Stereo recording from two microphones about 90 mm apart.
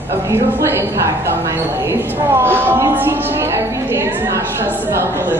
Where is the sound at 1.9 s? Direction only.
25° right (ahead or behind).